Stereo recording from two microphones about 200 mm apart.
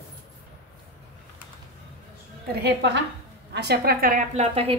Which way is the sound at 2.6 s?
60° right (ahead or behind).